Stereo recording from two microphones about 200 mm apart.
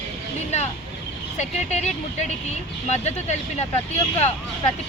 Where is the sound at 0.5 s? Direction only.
35° left (ahead or behind).